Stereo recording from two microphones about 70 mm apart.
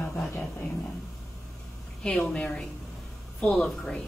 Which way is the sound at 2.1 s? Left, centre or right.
Centre.